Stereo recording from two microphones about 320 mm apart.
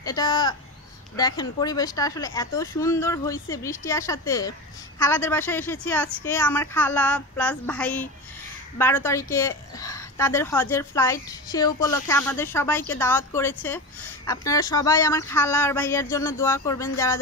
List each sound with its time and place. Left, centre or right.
0.0 s a woman's voice: centre